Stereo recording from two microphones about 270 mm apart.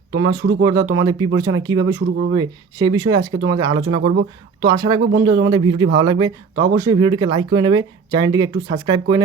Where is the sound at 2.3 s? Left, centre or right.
Centre.